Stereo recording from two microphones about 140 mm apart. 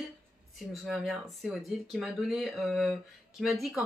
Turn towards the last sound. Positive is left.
turn(degrees=0)  # may be behind; listen again after turning